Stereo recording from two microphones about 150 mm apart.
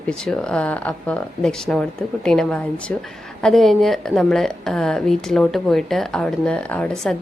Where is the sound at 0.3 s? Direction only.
5° left (ahead or behind).